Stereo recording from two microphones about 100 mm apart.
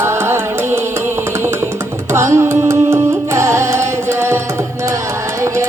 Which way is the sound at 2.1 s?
25° right (ahead or behind).